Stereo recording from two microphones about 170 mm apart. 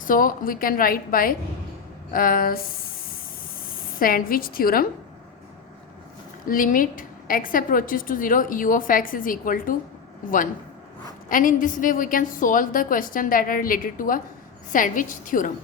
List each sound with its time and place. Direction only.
0.0 s a woman's voice: 55° left (ahead or behind)
3.9 s a woman's voice: 60° left (ahead or behind)
6.5 s a woman's voice: 55° left (ahead or behind)